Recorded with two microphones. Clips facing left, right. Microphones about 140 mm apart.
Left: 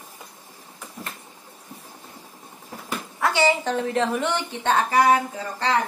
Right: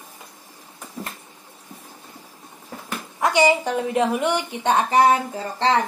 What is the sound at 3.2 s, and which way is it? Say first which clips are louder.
A woman's voice: right 3 dB; 15° right (ahead or behind).